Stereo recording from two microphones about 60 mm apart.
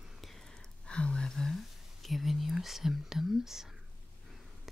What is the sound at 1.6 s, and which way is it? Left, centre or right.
Speech, centre.